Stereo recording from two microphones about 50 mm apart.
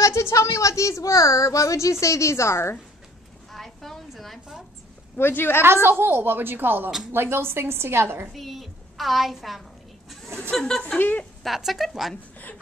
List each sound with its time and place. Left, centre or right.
0.0 s a woman's voice: left
3.5 s a sound: centre
5.2 s a woman's voice: left
5.6 s a woman's voice: right
8.3 s a woman's voice: centre
10.5 s speech: centre
11.0 s speech: left
11.4 s speech: centre